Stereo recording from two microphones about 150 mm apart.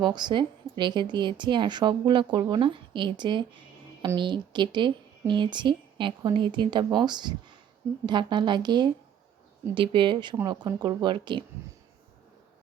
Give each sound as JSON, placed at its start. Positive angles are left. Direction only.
{"t": 0.0, "sound": "a woman's voice", "side_deg": -30}